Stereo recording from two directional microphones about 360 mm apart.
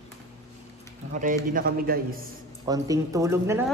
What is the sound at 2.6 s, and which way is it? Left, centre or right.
A man's voice, centre.